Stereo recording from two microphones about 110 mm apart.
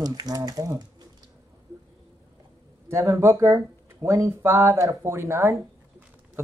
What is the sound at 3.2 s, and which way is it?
Speech, 30° right (ahead or behind).